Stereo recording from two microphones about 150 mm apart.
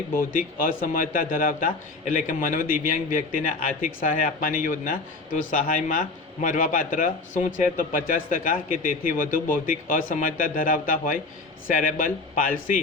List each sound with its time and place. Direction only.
0.3 s a man's voice: 70° left (ahead or behind)